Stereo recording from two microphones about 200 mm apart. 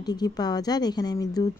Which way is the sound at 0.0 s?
20° left (ahead or behind).